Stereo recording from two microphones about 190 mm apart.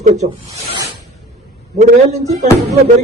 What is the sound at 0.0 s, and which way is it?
Speech, 35° right (ahead or behind).